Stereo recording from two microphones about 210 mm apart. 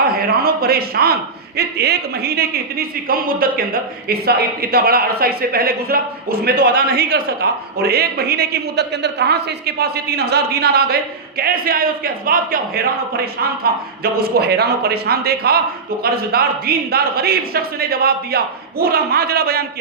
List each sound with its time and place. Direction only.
0.1 s a man's voice: 45° right (ahead or behind)